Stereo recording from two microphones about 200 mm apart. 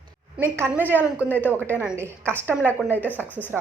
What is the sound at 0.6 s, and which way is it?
A woman's voice, 10° right (ahead or behind).